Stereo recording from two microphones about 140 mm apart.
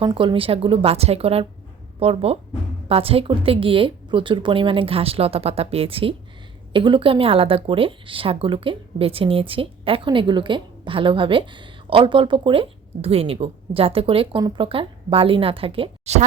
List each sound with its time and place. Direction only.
0.0 s a woman's voice: 35° right (ahead or behind)